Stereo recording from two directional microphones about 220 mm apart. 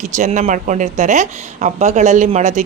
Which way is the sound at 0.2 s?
35° right (ahead or behind).